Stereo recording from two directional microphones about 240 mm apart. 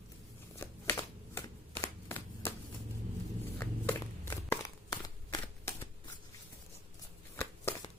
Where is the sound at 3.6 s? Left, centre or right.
Centre.